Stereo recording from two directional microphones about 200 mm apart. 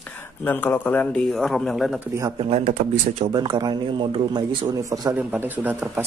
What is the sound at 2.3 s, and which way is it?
Speech, 30° right (ahead or behind).